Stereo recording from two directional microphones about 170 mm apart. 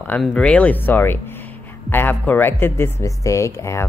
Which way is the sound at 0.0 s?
5° left (ahead or behind).